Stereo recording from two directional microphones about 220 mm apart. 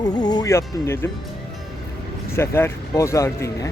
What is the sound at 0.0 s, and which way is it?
Speech, 20° left (ahead or behind).